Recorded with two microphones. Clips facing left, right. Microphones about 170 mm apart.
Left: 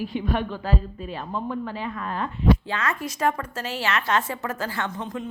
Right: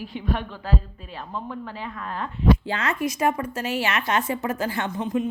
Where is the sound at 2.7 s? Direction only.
25° right (ahead or behind).